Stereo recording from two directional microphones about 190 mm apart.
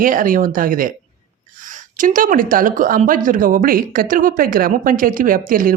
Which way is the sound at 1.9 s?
45° right (ahead or behind).